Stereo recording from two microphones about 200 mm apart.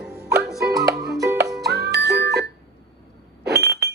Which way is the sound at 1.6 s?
55° right (ahead or behind).